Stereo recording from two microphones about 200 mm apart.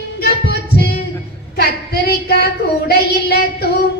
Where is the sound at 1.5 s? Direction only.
50° left (ahead or behind).